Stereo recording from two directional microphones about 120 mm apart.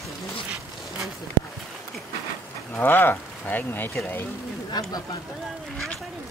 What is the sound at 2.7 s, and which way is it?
Speech, 15° left (ahead or behind).